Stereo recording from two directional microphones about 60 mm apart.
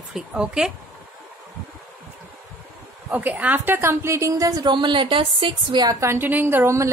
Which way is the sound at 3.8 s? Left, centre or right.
Right.